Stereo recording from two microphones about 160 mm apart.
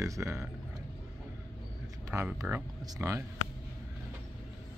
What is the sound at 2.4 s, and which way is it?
Speech, 5° right (ahead or behind).